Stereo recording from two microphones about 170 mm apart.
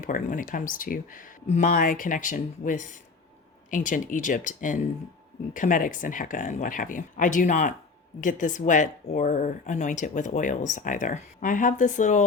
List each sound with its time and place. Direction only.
0.0 s a woman's voice: 50° left (ahead or behind)
1.7 s a woman's voice: 55° left (ahead or behind)